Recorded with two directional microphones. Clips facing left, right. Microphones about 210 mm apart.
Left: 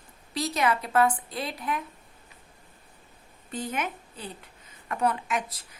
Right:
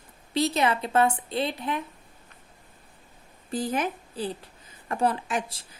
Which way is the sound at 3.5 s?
35° right (ahead or behind).